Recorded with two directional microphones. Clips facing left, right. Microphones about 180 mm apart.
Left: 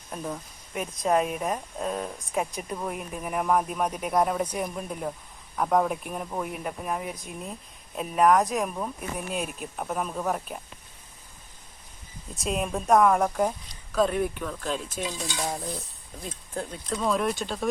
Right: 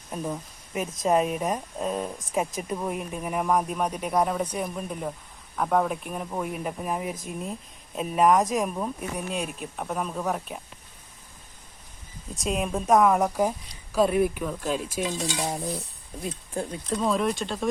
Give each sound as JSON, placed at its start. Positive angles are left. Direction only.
{"t": 0.1, "sound": "speech", "side_deg": -5}
{"t": 12.3, "sound": "speech", "side_deg": 0}
{"t": 16.2, "sound": "speech", "side_deg": -5}